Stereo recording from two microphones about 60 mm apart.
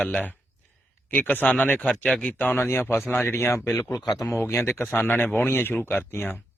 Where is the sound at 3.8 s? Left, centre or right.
Left.